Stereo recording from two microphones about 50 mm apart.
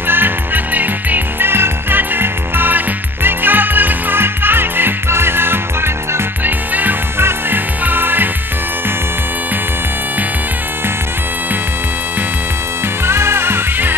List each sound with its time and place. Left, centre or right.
0.0 s music: right
1.5 s music: right
6.7 s music: right
7.2 s music: right
13.0 s music: right